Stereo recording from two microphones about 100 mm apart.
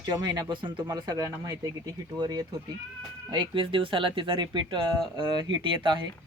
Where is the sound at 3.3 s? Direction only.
50° right (ahead or behind).